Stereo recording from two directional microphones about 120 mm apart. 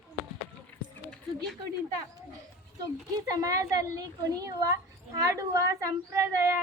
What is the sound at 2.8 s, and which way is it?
A child's voice, 30° right (ahead or behind).